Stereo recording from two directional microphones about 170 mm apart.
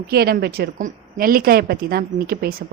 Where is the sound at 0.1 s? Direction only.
65° right (ahead or behind).